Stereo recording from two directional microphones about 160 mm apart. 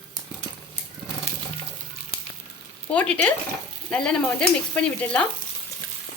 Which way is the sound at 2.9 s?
10° left (ahead or behind).